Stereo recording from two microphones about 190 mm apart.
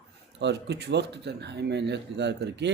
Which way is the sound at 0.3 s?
65° right (ahead or behind).